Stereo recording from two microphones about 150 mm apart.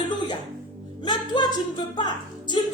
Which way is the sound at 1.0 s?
30° left (ahead or behind).